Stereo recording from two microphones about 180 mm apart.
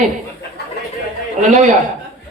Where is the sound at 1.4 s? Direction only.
45° right (ahead or behind).